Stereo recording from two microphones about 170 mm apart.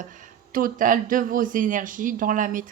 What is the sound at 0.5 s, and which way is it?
Speech, 55° right (ahead or behind).